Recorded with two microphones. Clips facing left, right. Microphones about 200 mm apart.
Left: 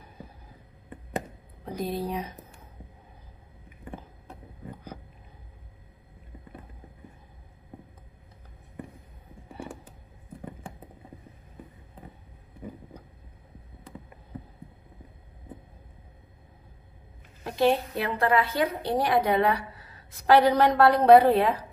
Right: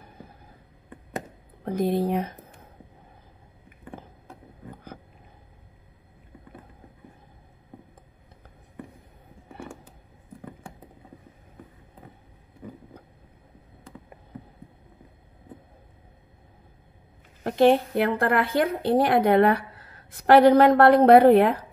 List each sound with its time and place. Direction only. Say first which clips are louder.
1.6 s speech: right 7 dB; 55° right (ahead or behind)
17.4 s a woman's voice: right 5 dB; 55° right (ahead or behind)